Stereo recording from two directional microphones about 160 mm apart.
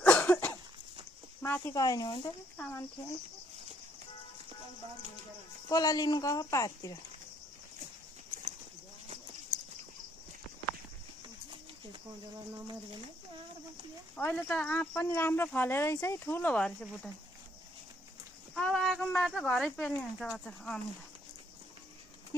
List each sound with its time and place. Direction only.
0.0 s cough: 10° left (ahead or behind)
1.4 s speech: 20° left (ahead or behind)
5.7 s speech: 25° left (ahead or behind)
14.1 s speech: 10° left (ahead or behind)
18.5 s speech: 5° left (ahead or behind)